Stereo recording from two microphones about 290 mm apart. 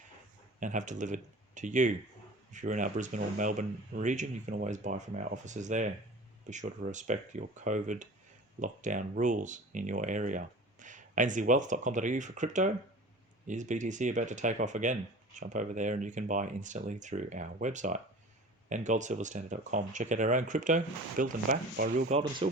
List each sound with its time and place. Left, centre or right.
0.6 s speech: right